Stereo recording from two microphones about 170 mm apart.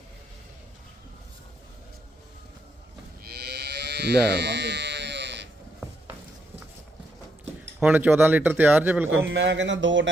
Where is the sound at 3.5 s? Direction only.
75° right (ahead or behind).